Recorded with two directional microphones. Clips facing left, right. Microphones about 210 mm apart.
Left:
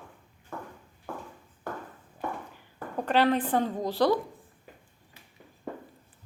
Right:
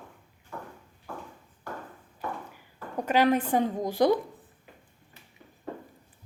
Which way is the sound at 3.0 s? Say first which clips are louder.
Right 1 dB; 15° right (ahead or behind).